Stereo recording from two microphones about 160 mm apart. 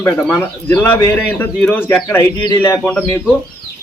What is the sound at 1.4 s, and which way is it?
Speech, 10° left (ahead or behind).